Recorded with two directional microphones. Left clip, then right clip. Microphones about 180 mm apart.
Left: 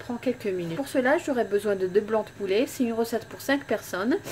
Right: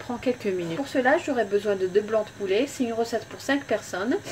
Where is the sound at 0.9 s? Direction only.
15° left (ahead or behind).